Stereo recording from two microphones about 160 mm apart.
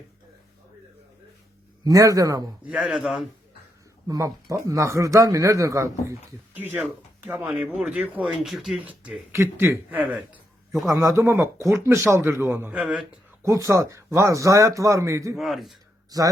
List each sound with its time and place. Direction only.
1.8 s speech: 20° right (ahead or behind)
2.6 s a man's voice: 5° right (ahead or behind)
4.0 s speech: 20° right (ahead or behind)
13.4 s speech: 20° right (ahead or behind)
15.4 s a man's voice: centre (ahead or behind)
16.0 s speech: 20° right (ahead or behind)